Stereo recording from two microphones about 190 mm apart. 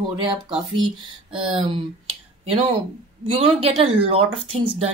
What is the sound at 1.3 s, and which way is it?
Speech, 30° right (ahead or behind).